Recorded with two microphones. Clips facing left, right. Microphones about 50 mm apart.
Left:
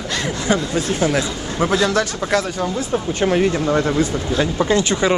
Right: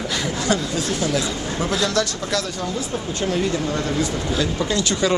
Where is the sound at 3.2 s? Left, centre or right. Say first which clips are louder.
Left 5 dB; left.